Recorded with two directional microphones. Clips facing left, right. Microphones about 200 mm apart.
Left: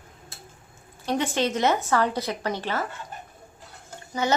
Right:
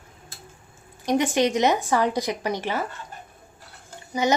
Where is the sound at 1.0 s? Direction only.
15° right (ahead or behind).